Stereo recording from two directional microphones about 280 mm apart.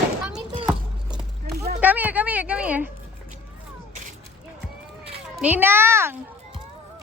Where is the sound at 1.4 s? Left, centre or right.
Right.